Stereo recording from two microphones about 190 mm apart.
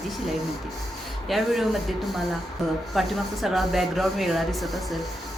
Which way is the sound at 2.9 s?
Centre (ahead or behind).